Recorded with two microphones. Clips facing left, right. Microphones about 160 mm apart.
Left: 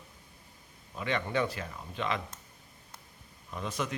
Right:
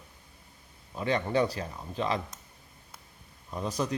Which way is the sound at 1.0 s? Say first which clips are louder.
Right 4 dB; 35° right (ahead or behind).